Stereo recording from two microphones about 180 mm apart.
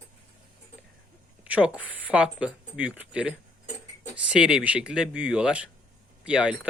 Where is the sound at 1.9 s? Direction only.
5° right (ahead or behind).